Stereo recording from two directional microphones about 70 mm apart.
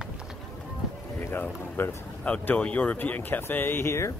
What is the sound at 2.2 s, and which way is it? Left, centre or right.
Speech, centre.